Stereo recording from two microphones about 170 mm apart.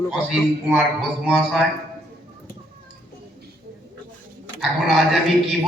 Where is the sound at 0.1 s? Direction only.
5° right (ahead or behind).